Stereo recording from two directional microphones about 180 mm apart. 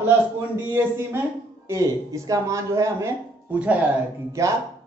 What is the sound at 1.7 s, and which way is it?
Speech, 15° right (ahead or behind).